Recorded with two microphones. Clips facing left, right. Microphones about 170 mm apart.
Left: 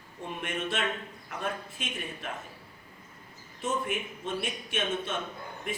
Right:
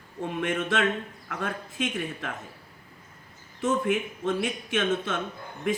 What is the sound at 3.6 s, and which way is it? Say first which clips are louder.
A man's voice: right 6 dB; 90° right.